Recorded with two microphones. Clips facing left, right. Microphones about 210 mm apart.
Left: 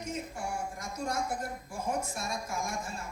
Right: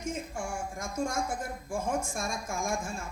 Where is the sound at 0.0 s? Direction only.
50° right (ahead or behind).